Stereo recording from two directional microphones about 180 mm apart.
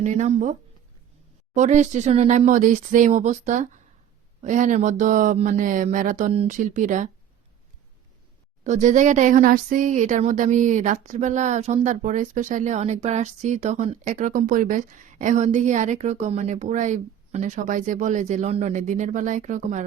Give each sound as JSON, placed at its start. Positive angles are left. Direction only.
{"t": 0.0, "sound": "speech", "side_deg": -40}
{"t": 1.5, "sound": "speech", "side_deg": -40}
{"t": 8.6, "sound": "speech", "side_deg": -40}